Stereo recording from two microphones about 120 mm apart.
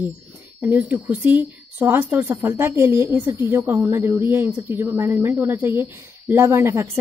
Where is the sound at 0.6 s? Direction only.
15° right (ahead or behind).